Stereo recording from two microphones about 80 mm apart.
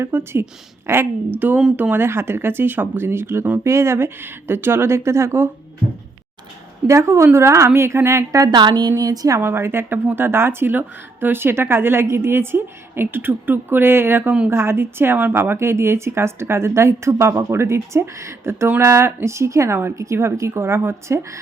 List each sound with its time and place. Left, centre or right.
0.0 s speech: right
6.8 s speech: right
8.4 s a woman's voice: right
9.0 s speech: right
9.4 s speech: right